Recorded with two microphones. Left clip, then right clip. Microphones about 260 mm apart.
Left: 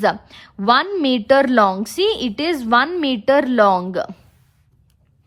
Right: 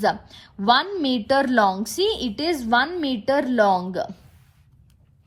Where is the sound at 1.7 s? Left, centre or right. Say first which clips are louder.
Left 4 dB; centre.